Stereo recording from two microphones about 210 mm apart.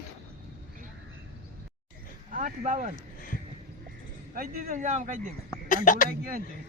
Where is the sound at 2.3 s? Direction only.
40° right (ahead or behind).